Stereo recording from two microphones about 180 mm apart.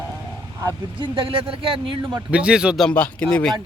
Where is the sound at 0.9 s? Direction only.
30° right (ahead or behind).